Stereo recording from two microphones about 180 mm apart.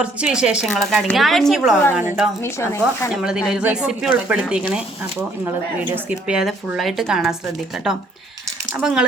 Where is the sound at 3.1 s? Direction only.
5° right (ahead or behind).